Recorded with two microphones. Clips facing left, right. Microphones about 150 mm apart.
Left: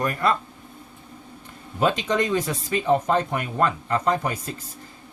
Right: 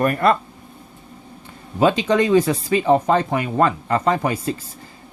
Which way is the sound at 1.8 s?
90° right.